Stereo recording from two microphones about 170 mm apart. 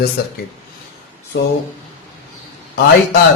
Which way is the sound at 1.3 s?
90° left.